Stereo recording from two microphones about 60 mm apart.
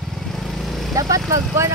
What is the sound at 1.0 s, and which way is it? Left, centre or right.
Speech, right.